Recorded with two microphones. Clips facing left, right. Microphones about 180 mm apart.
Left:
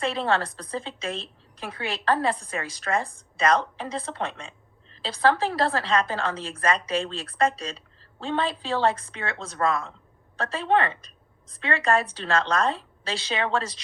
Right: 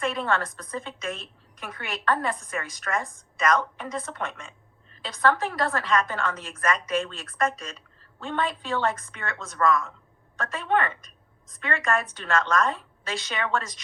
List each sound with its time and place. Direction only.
0.0 s a woman's voice: 30° left (ahead or behind)